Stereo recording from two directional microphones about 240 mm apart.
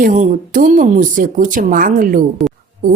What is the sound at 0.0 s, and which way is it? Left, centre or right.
Speech, right.